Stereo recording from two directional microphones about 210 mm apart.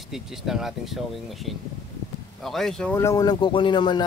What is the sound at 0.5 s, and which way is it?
Speech, centre (ahead or behind).